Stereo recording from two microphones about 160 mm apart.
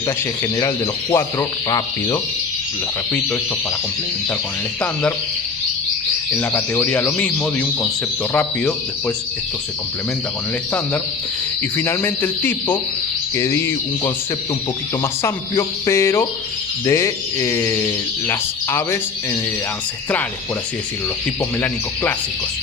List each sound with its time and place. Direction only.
1.1 s speech: 20° left (ahead or behind)
6.3 s speech: 15° left (ahead or behind)
11.8 s speech: 15° left (ahead or behind)
15.2 s speech: 15° left (ahead or behind)